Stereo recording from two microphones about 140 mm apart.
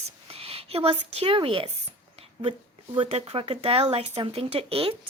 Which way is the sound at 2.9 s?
40° right (ahead or behind).